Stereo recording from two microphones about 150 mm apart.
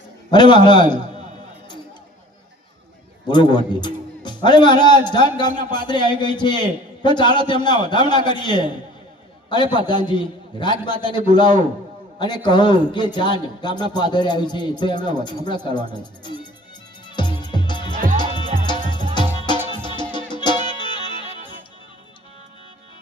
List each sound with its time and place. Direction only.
0.3 s a man's voice: 30° left (ahead or behind)
3.2 s a man's voice: 30° left (ahead or behind)
9.7 s a man's voice: 30° left (ahead or behind)
17.1 s music: 30° left (ahead or behind)
17.9 s music: 65° right (ahead or behind)
18.6 s music: 30° left (ahead or behind)